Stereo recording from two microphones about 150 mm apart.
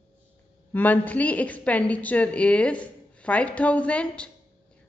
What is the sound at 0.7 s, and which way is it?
A woman's voice, 10° left (ahead or behind).